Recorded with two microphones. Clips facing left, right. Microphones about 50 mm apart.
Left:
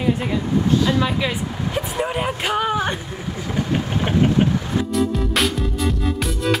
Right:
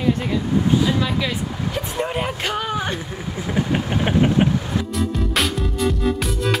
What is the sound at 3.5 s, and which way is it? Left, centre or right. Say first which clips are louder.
Vehicle: right 1 dB; centre.